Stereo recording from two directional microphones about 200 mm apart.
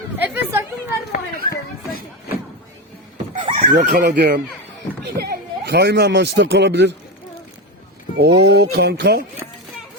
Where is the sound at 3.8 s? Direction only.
50° right (ahead or behind).